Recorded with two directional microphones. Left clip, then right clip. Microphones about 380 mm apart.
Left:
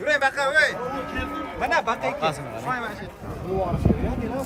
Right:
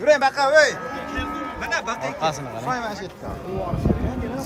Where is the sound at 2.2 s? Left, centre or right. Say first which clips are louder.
Right 1 dB; centre.